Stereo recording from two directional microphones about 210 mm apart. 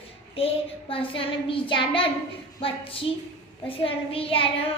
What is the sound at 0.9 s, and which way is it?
A woman's voice, 25° left (ahead or behind).